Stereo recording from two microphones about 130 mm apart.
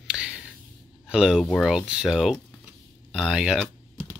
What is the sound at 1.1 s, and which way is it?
Speech, 5° right (ahead or behind).